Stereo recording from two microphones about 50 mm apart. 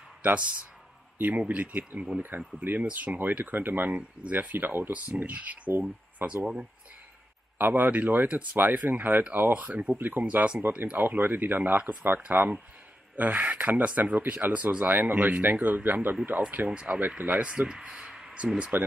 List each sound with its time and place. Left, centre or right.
0.2 s speech: right
2.3 s speech: right
5.7 s speech: right
6.4 s speech: right
7.5 s speech: right
9.9 s speech: right
10.2 s speech: right
11.0 s speech: right
11.7 s speech: right
12.3 s speech: right
17.5 s speech: centre
18.2 s a sound: right
18.7 s speech: right